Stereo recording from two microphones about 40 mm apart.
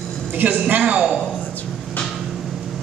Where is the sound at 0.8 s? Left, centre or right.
Right.